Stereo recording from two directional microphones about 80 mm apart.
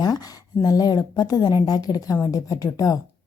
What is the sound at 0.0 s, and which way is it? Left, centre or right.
Speech, left.